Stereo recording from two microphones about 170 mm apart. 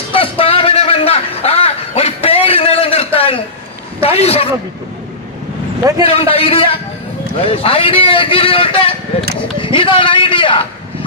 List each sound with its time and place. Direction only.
0.1 s a sound: 30° left (ahead or behind)
4.0 s a man's voice: 35° left (ahead or behind)
6.0 s a man's voice: 35° left (ahead or behind)